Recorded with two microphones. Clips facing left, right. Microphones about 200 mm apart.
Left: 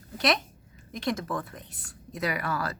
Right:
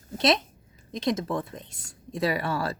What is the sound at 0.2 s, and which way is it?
A woman's voice, 25° right (ahead or behind).